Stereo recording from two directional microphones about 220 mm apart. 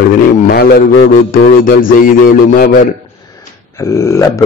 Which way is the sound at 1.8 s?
40° left (ahead or behind).